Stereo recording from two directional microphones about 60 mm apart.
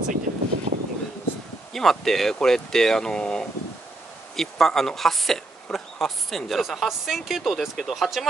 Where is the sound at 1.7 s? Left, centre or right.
Centre.